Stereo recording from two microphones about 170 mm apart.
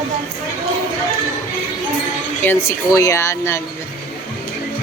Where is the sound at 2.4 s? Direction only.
15° left (ahead or behind).